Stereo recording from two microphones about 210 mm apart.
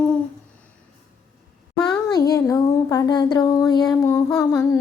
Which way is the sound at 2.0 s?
20° left (ahead or behind).